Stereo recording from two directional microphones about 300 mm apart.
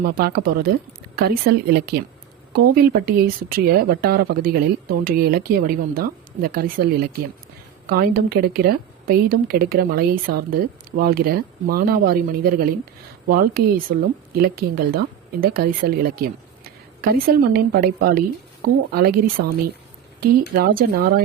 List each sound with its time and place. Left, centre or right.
0.0 s a woman's voice: right